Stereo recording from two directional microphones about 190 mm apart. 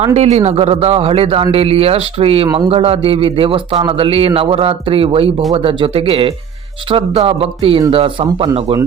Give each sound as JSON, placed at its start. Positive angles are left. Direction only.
{"t": 0.0, "sound": "speech", "side_deg": -35}